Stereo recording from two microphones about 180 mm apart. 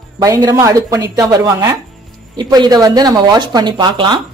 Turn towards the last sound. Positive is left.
turn(degrees=-25)  # may be behind; listen again after turning